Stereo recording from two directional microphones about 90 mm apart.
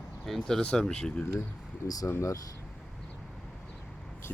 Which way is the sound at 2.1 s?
35° left (ahead or behind).